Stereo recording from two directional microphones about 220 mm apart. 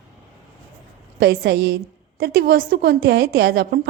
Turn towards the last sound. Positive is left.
turn(degrees=-45)  # may be behind; listen again after turning